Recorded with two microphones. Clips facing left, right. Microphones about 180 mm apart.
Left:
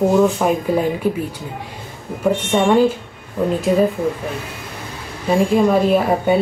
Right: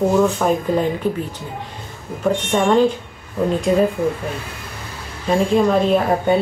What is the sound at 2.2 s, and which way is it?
Speech, 5° left (ahead or behind).